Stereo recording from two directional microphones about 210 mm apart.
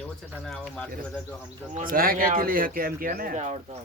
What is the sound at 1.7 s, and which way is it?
Speech, 40° right (ahead or behind).